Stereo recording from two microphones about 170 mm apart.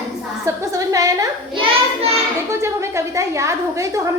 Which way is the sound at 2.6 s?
15° right (ahead or behind).